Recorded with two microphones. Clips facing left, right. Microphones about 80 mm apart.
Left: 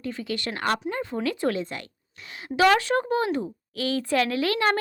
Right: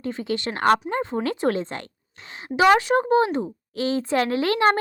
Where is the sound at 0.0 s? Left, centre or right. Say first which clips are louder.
Right 4 dB; right.